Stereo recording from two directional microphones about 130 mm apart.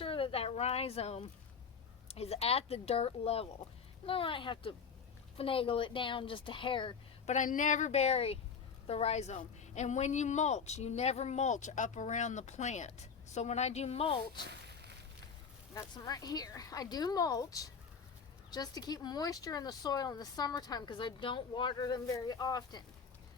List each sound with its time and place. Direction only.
0.0 s a sound: 45° left (ahead or behind)
2.0 s speech: 55° left (ahead or behind)
7.3 s a woman's voice: 85° left; by 14.4 s 45° left (ahead or behind)
15.7 s speech: 25° left (ahead or behind)